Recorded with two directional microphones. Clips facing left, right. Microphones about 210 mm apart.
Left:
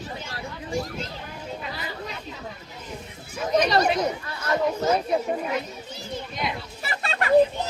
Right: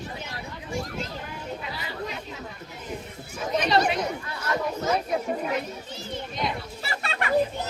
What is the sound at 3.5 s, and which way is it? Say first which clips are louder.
Speech: left 2 dB; 40° left (ahead or behind).